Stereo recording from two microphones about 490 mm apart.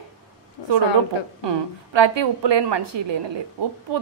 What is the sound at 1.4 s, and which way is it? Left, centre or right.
A woman's voice, right.